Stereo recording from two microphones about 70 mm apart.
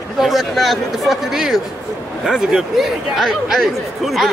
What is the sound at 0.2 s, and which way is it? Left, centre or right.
Speech, centre.